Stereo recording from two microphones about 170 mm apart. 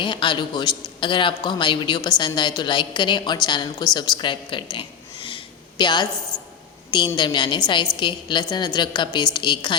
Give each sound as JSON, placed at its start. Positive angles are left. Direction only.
{"t": 0.0, "sound": "a man's voice", "side_deg": 30}
{"t": 3.9, "sound": "a sound", "side_deg": 30}
{"t": 7.2, "sound": "a man's voice", "side_deg": 25}